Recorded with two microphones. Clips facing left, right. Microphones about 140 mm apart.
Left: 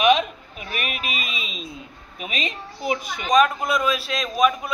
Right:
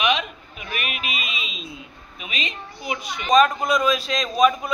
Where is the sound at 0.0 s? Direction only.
40° left (ahead or behind).